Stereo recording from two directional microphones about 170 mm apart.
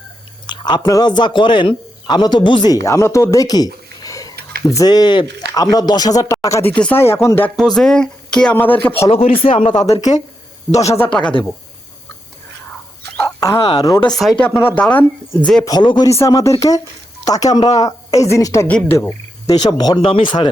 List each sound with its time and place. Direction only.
0.4 s a woman's voice: 25° left (ahead or behind)
4.0 s a sound: 20° left (ahead or behind)
4.7 s a woman's voice: 20° left (ahead or behind)
7.5 s speech: centre (ahead or behind)
9.0 s speech: 35° left (ahead or behind)
10.9 s speech: 10° left (ahead or behind)
13.1 s a sound: 15° left (ahead or behind)
13.6 s a woman's voice: 25° left (ahead or behind)
14.0 s speech: centre (ahead or behind)
15.6 s a woman's voice: 25° left (ahead or behind)